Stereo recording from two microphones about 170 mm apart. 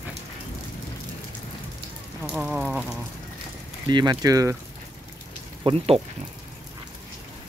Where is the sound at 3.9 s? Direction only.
25° right (ahead or behind).